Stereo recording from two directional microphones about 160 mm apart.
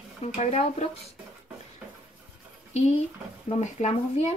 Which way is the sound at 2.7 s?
45° left (ahead or behind).